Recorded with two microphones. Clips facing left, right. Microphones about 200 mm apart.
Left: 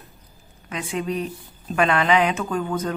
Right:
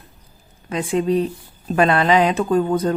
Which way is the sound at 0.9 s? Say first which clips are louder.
Right 8 dB; 30° right (ahead or behind).